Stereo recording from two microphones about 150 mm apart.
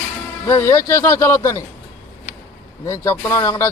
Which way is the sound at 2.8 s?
20° left (ahead or behind).